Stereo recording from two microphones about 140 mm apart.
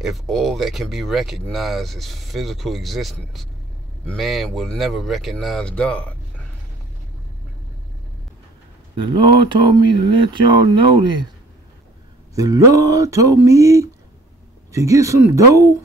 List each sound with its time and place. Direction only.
0.0 s speech: centre (ahead or behind)
8.9 s speech: 35° right (ahead or behind)
12.4 s speech: 25° right (ahead or behind)